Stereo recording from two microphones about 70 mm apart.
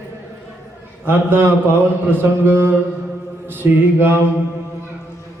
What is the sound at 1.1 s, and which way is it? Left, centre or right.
Speech, right.